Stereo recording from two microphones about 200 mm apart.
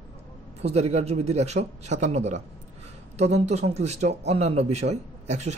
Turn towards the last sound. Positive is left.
turn(degrees=-35)  # may be behind; listen again after turning